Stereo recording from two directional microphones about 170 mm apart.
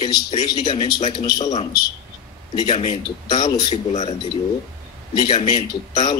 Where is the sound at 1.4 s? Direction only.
40° left (ahead or behind).